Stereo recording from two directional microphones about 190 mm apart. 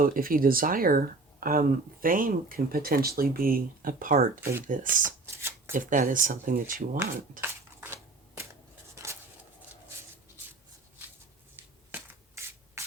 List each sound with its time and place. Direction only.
0.0 s speech: 50° right (ahead or behind)
5.2 s shuffling cards: 15° right (ahead or behind)
5.7 s speech: 45° right (ahead or behind)
11.5 s shuffle: 10° right (ahead or behind)